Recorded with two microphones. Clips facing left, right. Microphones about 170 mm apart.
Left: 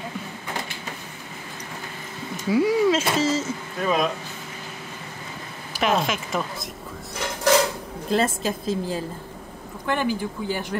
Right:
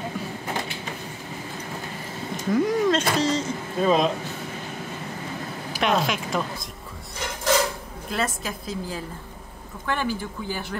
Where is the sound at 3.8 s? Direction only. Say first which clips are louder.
Right 3 dB; 25° right (ahead or behind).